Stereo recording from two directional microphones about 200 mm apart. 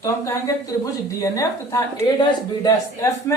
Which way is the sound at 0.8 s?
15° left (ahead or behind).